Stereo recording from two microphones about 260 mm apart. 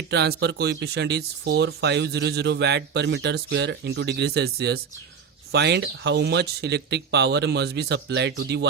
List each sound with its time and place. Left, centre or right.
0.1 s speech: right